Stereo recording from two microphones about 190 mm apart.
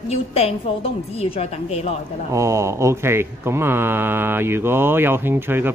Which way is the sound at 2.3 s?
15° right (ahead or behind).